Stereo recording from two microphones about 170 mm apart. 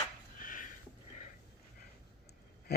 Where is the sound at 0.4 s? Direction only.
55° left (ahead or behind).